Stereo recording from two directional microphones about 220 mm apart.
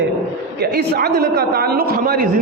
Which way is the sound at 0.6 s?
45° right (ahead or behind).